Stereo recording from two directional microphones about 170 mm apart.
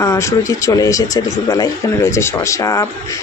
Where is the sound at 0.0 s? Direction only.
20° left (ahead or behind).